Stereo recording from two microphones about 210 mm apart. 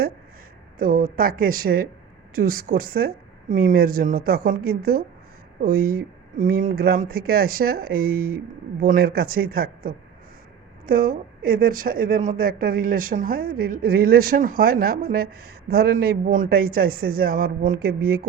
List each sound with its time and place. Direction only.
0.8 s a woman's voice: 40° right (ahead or behind)